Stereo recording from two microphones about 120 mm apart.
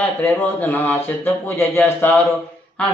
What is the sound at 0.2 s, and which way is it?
A man's voice, 15° left (ahead or behind).